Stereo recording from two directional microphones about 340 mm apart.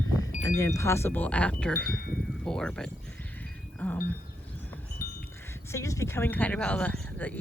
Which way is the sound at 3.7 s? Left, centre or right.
Centre.